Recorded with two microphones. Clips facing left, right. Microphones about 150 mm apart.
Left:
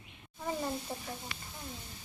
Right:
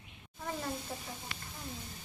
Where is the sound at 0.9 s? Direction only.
20° left (ahead or behind).